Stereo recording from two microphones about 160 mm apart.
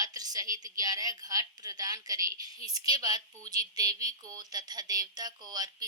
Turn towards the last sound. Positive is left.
turn(degrees=-25)  # may be behind; listen again after turning